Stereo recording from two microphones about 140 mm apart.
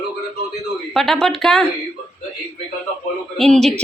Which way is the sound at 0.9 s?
Centre (ahead or behind).